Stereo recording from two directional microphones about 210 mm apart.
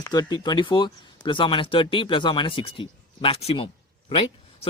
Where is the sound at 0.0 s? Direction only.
20° left (ahead or behind).